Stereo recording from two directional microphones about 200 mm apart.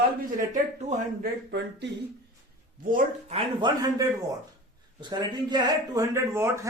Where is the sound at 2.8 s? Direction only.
45° right (ahead or behind).